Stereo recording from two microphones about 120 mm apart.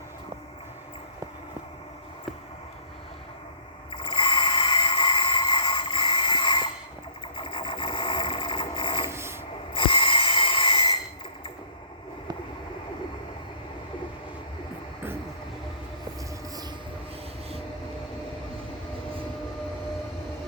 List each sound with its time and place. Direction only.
3.9 s a sound: 45° left (ahead or behind)
7.3 s vehicle: 45° left (ahead or behind)
9.0 s rub: 20° right (ahead or behind)
9.7 s snort: 45° left (ahead or behind)